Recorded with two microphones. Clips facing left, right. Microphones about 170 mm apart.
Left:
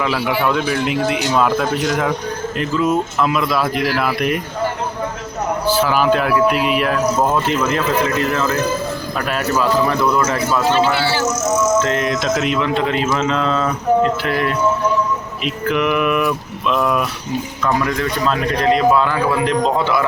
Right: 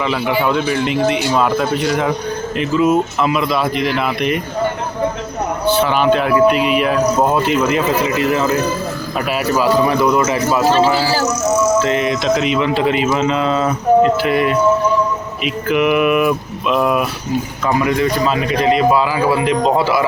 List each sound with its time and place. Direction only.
0.0 s speech: centre (ahead or behind)
5.7 s speech: 5° left (ahead or behind)
10.6 s a man's voice: 35° right (ahead or behind)
11.8 s speech: 5° right (ahead or behind)
15.6 s speech: 5° right (ahead or behind)